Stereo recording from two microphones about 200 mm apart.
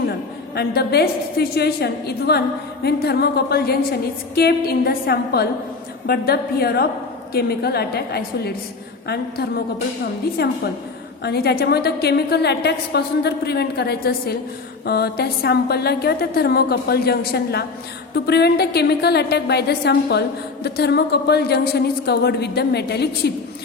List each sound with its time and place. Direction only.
0.1 s a woman's voice: 50° left (ahead or behind)
11.2 s a woman's voice: 50° left (ahead or behind)